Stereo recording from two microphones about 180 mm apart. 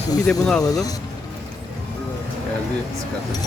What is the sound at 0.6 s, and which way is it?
Speech, 20° left (ahead or behind).